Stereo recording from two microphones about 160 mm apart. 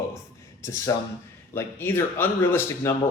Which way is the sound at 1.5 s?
15° left (ahead or behind).